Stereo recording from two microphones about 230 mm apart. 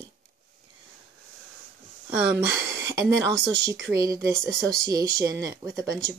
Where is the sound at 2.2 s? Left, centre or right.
Centre.